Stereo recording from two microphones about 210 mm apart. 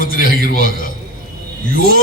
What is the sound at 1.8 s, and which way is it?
Speech, 45° right (ahead or behind).